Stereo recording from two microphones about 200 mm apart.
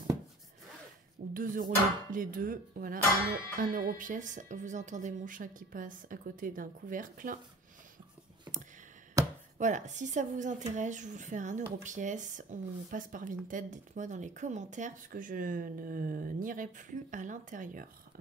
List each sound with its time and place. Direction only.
1.3 s dishes: 40° right (ahead or behind)
2.1 s speech: 45° right (ahead or behind)
9.2 s chopping: 15° right (ahead or behind)
9.6 s speech: 35° right (ahead or behind)